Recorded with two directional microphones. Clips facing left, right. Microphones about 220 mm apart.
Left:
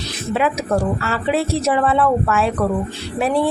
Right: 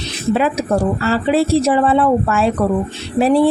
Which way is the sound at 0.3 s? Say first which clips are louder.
Right 1 dB; 35° right (ahead or behind).